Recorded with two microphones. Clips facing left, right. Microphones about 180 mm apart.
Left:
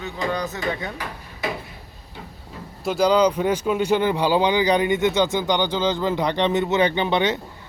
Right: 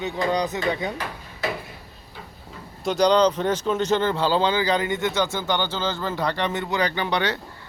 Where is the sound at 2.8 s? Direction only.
5° left (ahead or behind).